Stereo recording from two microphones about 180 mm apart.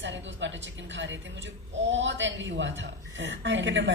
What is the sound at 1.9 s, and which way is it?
A man's voice, 90° right.